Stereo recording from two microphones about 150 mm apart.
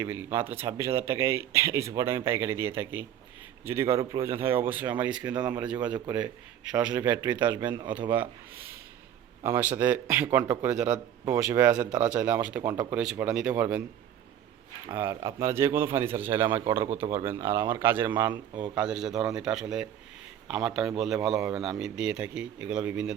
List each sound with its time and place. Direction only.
0.0 s speech: 15° right (ahead or behind)
14.9 s speech: 15° right (ahead or behind)